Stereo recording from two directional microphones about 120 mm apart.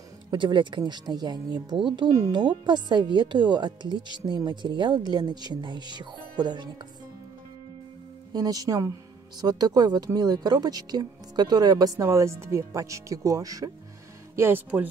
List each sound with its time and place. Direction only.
0.3 s a woman's voice: 40° right (ahead or behind)
2.4 s a woman's voice: 40° right (ahead or behind)
8.3 s a woman's voice: 30° right (ahead or behind)
14.3 s speech: 20° right (ahead or behind)